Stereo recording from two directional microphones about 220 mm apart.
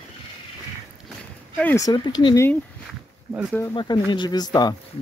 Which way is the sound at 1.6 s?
15° left (ahead or behind).